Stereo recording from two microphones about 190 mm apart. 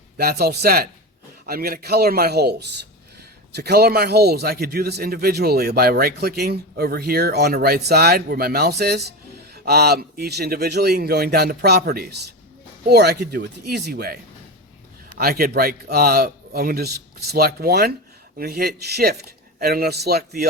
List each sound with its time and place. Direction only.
0.2 s a man's voice: 55° right (ahead or behind)
15.2 s a man's voice: 50° right (ahead or behind)